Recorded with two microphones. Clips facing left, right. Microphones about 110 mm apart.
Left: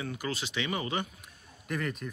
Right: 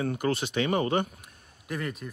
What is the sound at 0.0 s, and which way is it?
Speech, 50° right (ahead or behind).